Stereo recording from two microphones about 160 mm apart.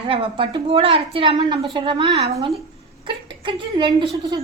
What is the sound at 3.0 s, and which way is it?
Speech, 30° right (ahead or behind).